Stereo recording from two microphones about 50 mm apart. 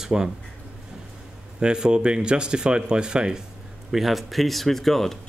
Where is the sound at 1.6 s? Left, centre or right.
Centre.